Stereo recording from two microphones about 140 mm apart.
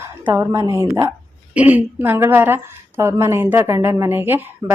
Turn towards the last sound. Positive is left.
turn(degrees=-15)  # may be behind; listen again after turning